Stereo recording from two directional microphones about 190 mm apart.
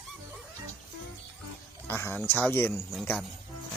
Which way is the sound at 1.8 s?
10° left (ahead or behind).